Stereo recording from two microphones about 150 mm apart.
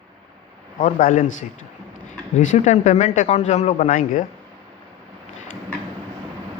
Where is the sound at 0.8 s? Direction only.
60° left (ahead or behind).